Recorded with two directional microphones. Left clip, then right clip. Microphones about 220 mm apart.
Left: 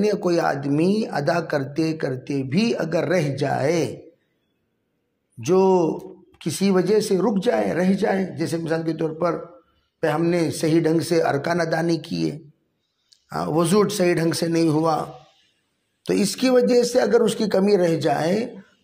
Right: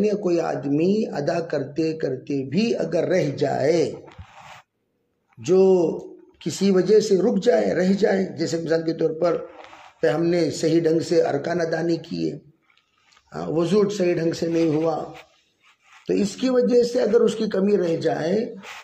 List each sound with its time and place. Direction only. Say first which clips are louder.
0.0 s speech: left 1 dB; 40° left (ahead or behind)
5.4 s speech: right 1 dB; 35° left (ahead or behind)
16.1 s speech: left 3 dB; 40° left (ahead or behind)